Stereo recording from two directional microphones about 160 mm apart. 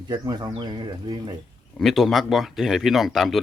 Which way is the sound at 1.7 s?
Centre (ahead or behind).